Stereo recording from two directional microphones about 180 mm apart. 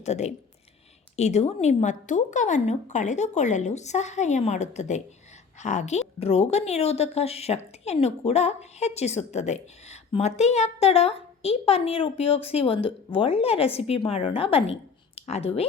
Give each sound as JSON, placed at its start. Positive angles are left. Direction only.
{"t": 0.0, "sound": "a woman's voice", "side_deg": 40}